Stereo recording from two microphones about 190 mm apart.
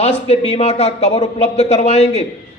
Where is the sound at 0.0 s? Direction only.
35° left (ahead or behind).